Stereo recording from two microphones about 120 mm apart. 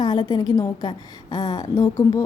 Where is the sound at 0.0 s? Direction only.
35° left (ahead or behind).